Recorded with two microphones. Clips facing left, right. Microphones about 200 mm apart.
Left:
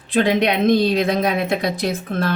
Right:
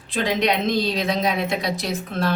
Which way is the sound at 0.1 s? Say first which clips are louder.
Left 4 dB; 55° left (ahead or behind).